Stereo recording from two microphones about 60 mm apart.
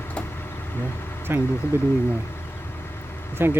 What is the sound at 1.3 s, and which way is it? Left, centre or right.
Speech, right.